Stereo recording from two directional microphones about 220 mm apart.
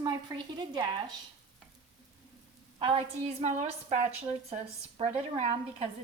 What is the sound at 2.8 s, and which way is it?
A woman's voice, 25° right (ahead or behind).